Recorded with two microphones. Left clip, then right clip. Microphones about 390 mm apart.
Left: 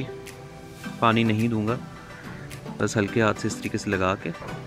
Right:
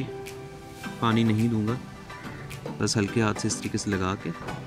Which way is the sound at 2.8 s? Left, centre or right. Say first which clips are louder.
Left 4 dB; centre.